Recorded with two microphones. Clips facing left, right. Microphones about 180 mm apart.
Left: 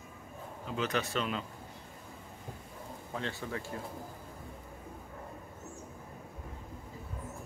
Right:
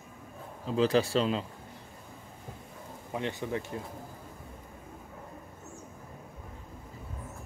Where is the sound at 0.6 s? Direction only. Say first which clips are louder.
Right 8 dB; 30° right (ahead or behind).